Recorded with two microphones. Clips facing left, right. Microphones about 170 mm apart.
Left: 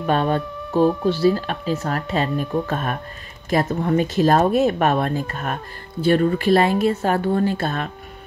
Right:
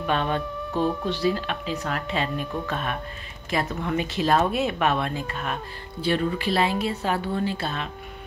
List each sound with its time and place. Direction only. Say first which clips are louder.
0.0 s speech: left 5 dB; 40° left (ahead or behind)